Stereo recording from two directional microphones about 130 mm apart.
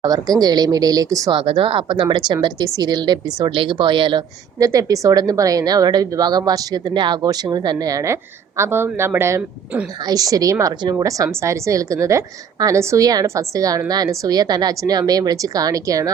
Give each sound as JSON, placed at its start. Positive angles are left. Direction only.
{"t": 0.0, "sound": "speech", "side_deg": -30}
{"t": 1.4, "sound": "a woman's voice", "side_deg": -40}
{"t": 4.6, "sound": "speech", "side_deg": -25}